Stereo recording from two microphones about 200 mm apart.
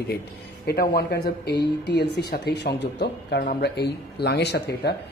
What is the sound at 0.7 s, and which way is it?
Speech, 50° left (ahead or behind).